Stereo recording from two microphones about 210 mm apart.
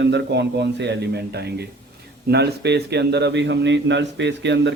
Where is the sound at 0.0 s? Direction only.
55° right (ahead or behind).